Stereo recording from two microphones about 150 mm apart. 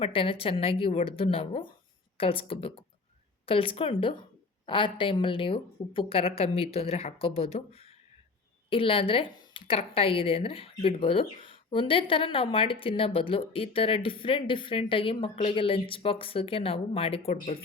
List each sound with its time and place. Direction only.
0.0 s speech: 35° left (ahead or behind)